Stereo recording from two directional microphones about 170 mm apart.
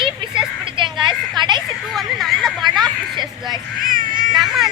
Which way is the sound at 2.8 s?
25° right (ahead or behind).